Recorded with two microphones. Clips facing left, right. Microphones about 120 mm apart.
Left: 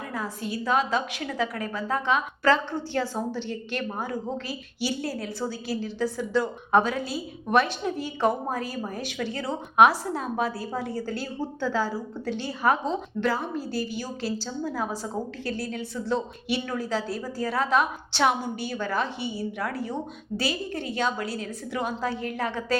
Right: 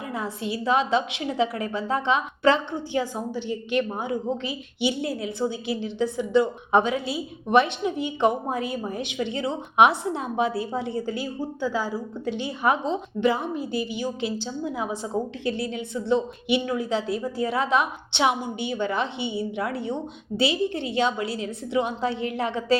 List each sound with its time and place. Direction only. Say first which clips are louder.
0.1 s a woman's voice: right 3 dB; 25° right (ahead or behind)